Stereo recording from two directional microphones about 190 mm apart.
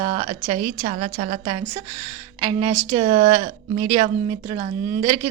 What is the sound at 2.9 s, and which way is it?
A woman's voice, 40° right (ahead or behind).